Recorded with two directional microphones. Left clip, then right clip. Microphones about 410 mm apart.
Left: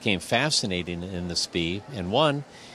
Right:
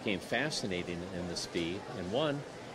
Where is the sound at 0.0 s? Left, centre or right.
Left.